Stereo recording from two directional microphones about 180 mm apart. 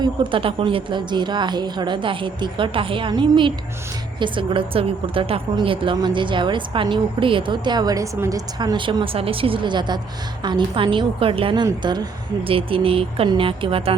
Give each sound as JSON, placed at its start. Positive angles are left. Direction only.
{"t": 0.0, "sound": "a woman's voice", "side_deg": -30}